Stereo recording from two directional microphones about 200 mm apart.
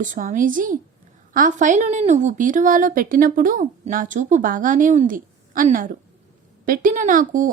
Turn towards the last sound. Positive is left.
turn(degrees=-40)  # may be behind; listen again after turning